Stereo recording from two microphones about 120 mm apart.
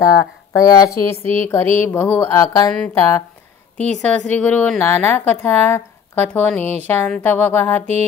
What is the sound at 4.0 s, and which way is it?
Speech, 10° left (ahead or behind).